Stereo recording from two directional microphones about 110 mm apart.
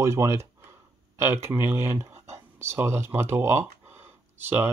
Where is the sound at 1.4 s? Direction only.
20° right (ahead or behind).